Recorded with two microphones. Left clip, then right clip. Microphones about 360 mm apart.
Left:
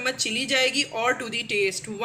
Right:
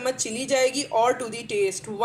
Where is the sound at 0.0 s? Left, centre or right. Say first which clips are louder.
Left 2 dB; centre.